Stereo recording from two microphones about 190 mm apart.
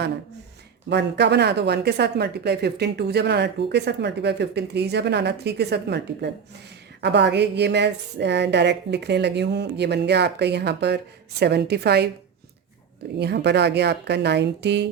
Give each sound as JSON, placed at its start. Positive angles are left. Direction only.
{"t": 0.9, "sound": "a woman's voice", "side_deg": -65}
{"t": 13.1, "sound": "a woman's voice", "side_deg": -60}